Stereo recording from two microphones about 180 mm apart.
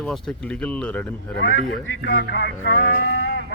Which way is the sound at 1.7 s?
90° left.